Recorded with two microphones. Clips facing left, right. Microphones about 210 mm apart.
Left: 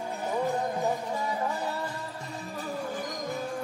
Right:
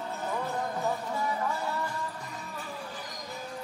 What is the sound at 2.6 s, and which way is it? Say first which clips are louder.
Music: left 9 dB; 50° left (ahead or behind).